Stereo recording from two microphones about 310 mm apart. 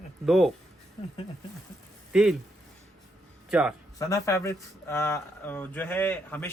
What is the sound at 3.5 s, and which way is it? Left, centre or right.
Speech, centre.